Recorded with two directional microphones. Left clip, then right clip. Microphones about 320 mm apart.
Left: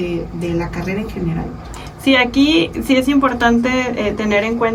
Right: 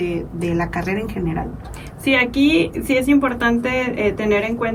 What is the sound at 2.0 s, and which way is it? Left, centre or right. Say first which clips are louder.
Speech: left 3 dB; centre.